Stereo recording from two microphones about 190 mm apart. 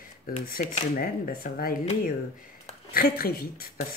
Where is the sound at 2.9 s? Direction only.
50° left (ahead or behind).